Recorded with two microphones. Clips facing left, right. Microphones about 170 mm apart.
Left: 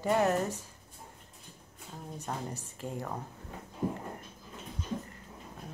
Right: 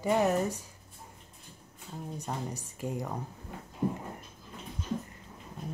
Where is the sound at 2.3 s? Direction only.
5° right (ahead or behind).